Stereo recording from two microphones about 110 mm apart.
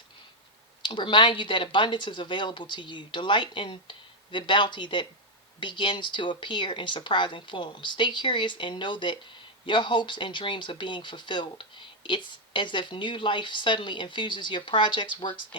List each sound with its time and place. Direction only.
0.8 s speech: 45° left (ahead or behind)